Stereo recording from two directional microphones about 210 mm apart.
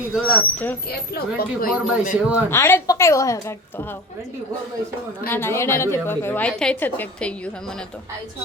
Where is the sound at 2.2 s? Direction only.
5° right (ahead or behind).